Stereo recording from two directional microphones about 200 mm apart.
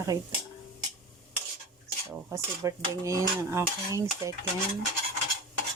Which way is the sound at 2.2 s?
15° right (ahead or behind).